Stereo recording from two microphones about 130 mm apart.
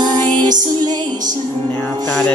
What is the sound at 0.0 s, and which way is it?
Music, 35° right (ahead or behind).